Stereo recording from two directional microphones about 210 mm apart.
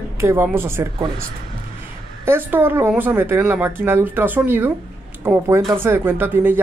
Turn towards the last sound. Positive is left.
turn(degrees=-10)  # may be behind; listen again after turning